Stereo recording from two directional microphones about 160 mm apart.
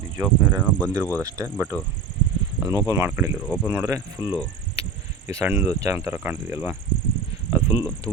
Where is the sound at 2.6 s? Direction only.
20° right (ahead or behind).